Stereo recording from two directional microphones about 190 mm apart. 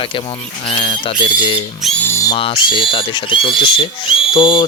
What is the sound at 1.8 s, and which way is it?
Speech, 10° left (ahead or behind).